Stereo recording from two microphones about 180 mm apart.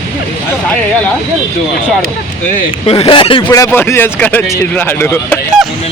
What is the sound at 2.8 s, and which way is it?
Speech, 30° left (ahead or behind).